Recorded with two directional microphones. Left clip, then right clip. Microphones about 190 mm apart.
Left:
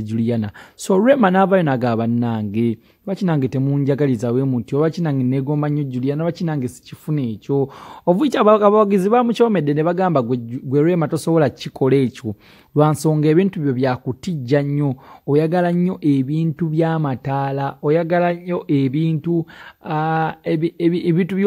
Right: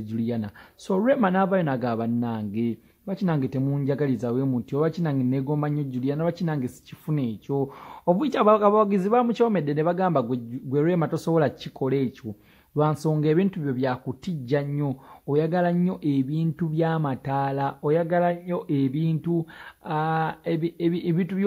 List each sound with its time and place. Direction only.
0.0 s speech: 35° left (ahead or behind)